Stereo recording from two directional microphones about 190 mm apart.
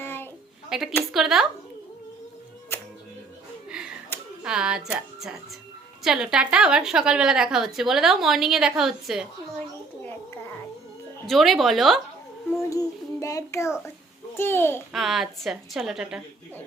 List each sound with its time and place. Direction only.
0.0 s a sound: 10° left (ahead or behind)
0.7 s a woman's voice: 5° right (ahead or behind)
4.1 s a sound: 10° left (ahead or behind)
4.4 s a woman's voice: 5° right (ahead or behind)
11.3 s a woman's voice: centre (ahead or behind)
12.7 s child singing: 15° left (ahead or behind)
14.9 s a woman's voice: centre (ahead or behind)